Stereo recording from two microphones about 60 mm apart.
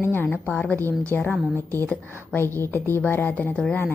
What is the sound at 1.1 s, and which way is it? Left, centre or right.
Speech, left.